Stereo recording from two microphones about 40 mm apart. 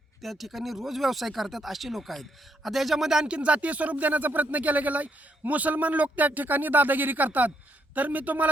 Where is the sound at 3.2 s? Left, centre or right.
Right.